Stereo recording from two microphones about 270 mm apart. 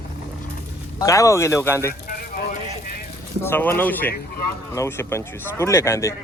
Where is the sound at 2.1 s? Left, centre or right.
Left.